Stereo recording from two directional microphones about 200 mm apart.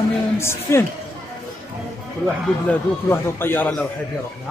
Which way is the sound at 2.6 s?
10° left (ahead or behind).